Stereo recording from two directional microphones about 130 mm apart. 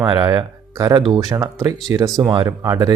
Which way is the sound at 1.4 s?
20° right (ahead or behind).